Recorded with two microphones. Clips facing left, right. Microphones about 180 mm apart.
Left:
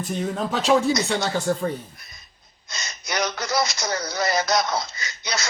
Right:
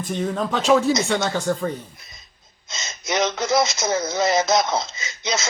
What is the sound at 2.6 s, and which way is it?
Speech, 20° right (ahead or behind).